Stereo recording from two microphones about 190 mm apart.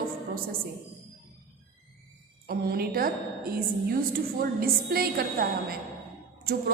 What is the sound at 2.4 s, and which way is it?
A woman's voice, 55° right (ahead or behind).